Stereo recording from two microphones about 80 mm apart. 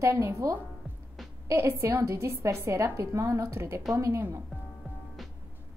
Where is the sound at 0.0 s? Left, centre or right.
Right.